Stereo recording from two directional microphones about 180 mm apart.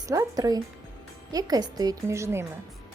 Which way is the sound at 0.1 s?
20° right (ahead or behind).